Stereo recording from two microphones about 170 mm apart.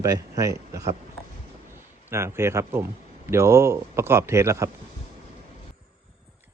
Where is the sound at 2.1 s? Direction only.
15° right (ahead or behind).